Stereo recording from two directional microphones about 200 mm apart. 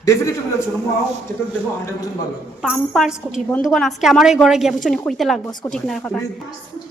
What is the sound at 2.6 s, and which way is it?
A woman's voice, centre (ahead or behind).